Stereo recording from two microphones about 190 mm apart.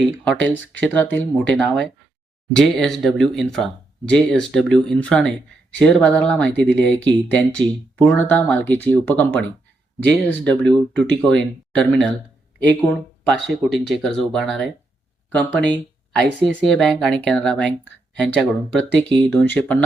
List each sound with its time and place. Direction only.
0.3 s speech: 10° left (ahead or behind)
19.0 s speech: 25° right (ahead or behind)
19.3 s speech: 5° left (ahead or behind)